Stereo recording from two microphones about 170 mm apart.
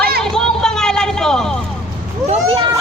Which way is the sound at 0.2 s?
5° left (ahead or behind).